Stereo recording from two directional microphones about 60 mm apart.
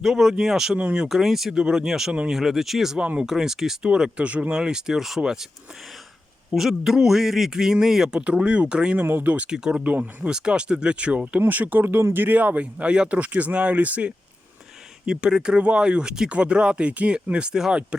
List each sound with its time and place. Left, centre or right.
0.0 s speech: centre; by 4.5 s right
4.5 s speech: centre
6.5 s speech: centre
8.2 s speech: centre
9.0 s speech: right; by 9.8 s centre
9.8 s speech: right
10.2 s speech: centre